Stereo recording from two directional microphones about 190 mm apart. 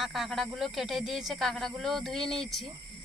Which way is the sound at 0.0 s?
Centre (ahead or behind).